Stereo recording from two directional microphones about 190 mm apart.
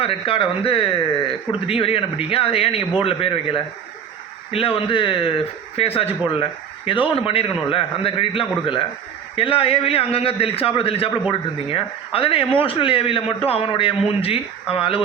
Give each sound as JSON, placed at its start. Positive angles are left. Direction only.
{"t": 0.0, "sound": "speech", "side_deg": 30}